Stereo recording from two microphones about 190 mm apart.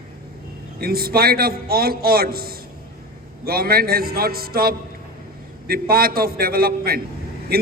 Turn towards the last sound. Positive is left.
turn(degrees=-55)  # may be behind; listen again after turning